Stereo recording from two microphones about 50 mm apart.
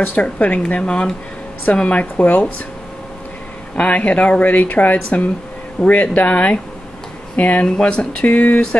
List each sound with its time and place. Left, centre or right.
0.0 s speech: left
1.9 s speech: left
3.7 s speech: left